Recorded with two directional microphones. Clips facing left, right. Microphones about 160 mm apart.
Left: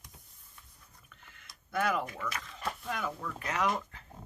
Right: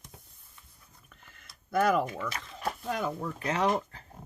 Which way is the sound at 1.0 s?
40° right (ahead or behind).